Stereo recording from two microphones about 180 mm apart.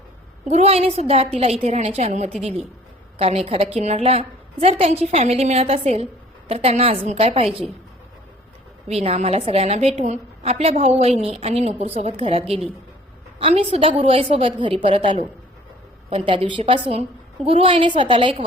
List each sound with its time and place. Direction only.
0.4 s a woman's voice: 35° right (ahead or behind)
8.9 s a woman's voice: 35° right (ahead or behind)